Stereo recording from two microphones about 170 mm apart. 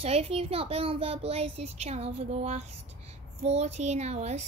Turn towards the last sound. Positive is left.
turn(degrees=-40)  # may be behind; listen again after turning